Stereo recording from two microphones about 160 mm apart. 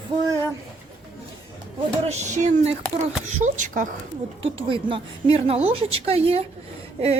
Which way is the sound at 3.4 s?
50° right (ahead or behind).